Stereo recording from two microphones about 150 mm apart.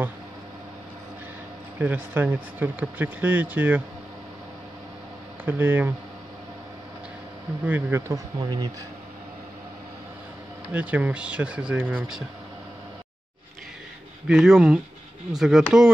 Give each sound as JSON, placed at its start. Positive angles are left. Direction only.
{"t": 1.8, "sound": "speech", "side_deg": -10}
{"t": 5.4, "sound": "speech", "side_deg": -15}
{"t": 7.6, "sound": "speech", "side_deg": -15}
{"t": 10.7, "sound": "speech", "side_deg": -10}
{"t": 14.2, "sound": "speech", "side_deg": -5}